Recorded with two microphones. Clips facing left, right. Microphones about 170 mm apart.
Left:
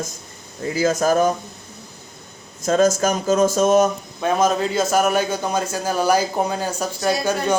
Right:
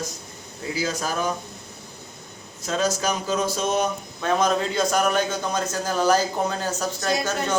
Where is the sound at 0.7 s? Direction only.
50° left (ahead or behind).